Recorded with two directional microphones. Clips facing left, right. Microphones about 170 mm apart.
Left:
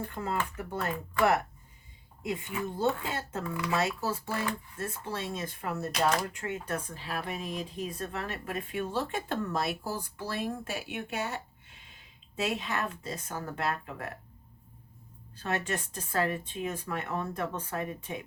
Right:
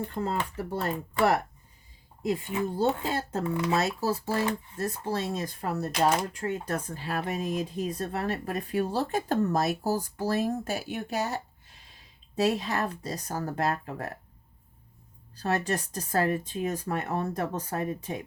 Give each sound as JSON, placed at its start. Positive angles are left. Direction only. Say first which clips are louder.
{"t": 0.1, "sound": "speech", "louder": "right 3 dB", "side_deg": -35}
{"t": 15.4, "sound": "speech", "louder": "right 4 dB", "side_deg": -40}